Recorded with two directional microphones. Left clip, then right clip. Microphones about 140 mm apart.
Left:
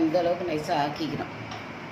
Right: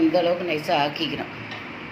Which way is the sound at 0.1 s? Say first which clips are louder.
Right 4 dB; 20° right (ahead or behind).